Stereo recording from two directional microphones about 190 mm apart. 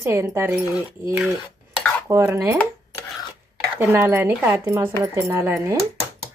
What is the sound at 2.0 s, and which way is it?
Speech, 15° right (ahead or behind).